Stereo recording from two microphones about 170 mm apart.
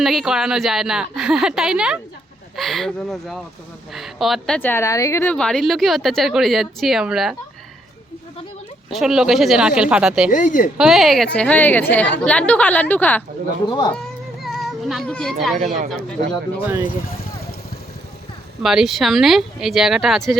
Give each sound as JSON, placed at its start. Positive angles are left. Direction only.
{"t": 0.0, "sound": "speech", "side_deg": 0}
{"t": 8.9, "sound": "speech", "side_deg": 0}
{"t": 10.3, "sound": "speech", "side_deg": 50}
{"t": 10.8, "sound": "a woman's voice", "side_deg": 0}
{"t": 13.7, "sound": "speech", "side_deg": 25}
{"t": 14.4, "sound": "children playing", "side_deg": 0}
{"t": 15.5, "sound": "speech", "side_deg": -45}
{"t": 15.9, "sound": "speech", "side_deg": 5}
{"t": 16.8, "sound": "speech", "side_deg": 60}
{"t": 18.6, "sound": "speech", "side_deg": 0}